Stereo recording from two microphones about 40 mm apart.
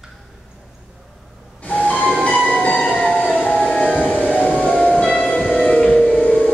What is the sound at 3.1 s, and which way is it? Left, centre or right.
Train, left.